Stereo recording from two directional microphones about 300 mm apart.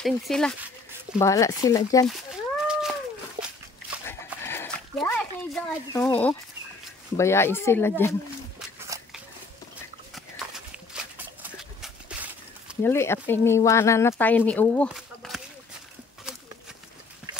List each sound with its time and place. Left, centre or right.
0.0 s speech: centre
2.7 s cat: centre
4.0 s dog: centre
7.2 s speech: centre
8.5 s a sound: centre
10.9 s horse: centre
12.8 s speech: centre